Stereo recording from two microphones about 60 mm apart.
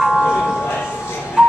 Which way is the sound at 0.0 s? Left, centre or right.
Centre.